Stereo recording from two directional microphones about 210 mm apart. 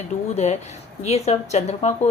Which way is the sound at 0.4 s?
35° left (ahead or behind).